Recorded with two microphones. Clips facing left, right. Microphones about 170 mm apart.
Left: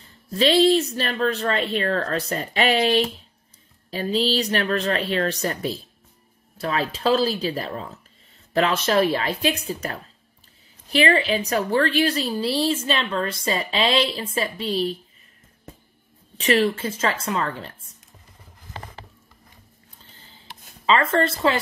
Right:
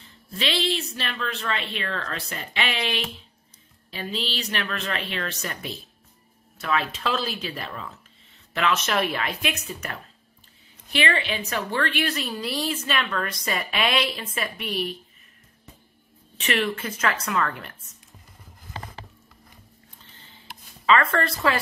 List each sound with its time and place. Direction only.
0.0 s a woman's voice: 40° left (ahead or behind)
16.3 s a woman's voice: 35° left (ahead or behind)
20.8 s a woman's voice: 25° left (ahead or behind)